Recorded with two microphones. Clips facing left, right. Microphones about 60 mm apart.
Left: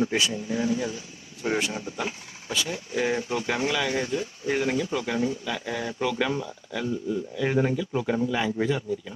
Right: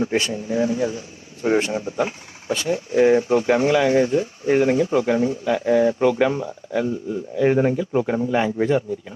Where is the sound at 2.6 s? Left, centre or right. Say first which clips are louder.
Right 12 dB; right.